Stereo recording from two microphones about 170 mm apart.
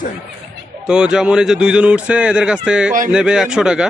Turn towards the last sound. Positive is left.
turn(degrees=-5)  # may be behind; listen again after turning